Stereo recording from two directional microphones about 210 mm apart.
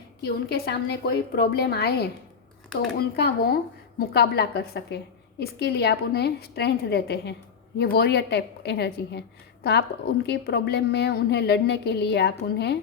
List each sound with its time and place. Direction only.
0.2 s a woman's voice: 50° left (ahead or behind)
10.2 s a woman's voice: 50° left (ahead or behind)